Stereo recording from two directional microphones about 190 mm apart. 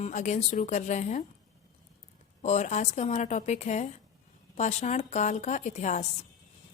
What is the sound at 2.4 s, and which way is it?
A woman's voice, 35° left (ahead or behind).